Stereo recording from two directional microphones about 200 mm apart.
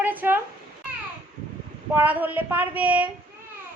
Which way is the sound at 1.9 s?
10° right (ahead or behind).